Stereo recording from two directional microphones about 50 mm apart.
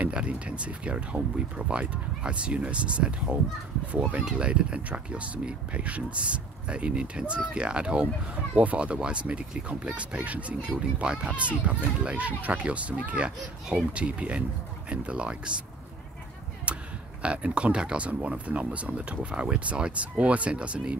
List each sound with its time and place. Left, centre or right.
0.0 s speech: right
16.7 s a sound: right
17.2 s speech: right